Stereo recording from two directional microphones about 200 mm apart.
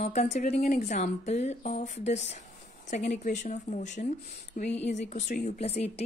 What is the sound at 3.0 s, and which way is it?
Speech, 50° left (ahead or behind).